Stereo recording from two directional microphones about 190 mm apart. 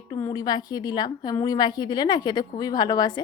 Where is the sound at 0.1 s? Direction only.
20° left (ahead or behind).